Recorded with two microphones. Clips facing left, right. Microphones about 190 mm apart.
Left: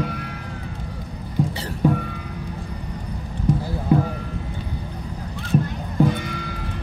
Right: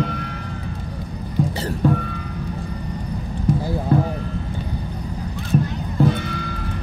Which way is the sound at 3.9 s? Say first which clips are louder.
Left 1 dB; 15° left (ahead or behind).